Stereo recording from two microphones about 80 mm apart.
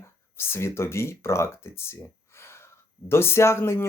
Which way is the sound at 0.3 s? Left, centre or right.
Left.